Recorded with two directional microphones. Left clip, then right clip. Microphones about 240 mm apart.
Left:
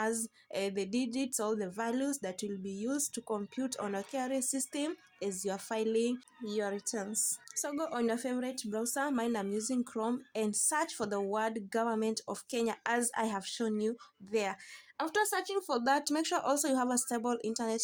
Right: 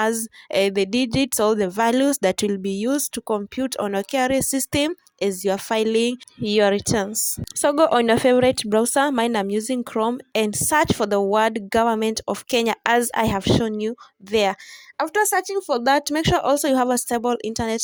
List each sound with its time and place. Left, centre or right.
0.0 s speech: right